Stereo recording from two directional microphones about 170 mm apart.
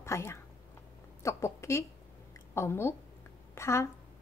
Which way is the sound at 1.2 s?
15° left (ahead or behind).